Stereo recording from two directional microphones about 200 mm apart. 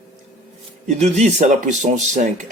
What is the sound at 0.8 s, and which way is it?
Speech, 35° right (ahead or behind).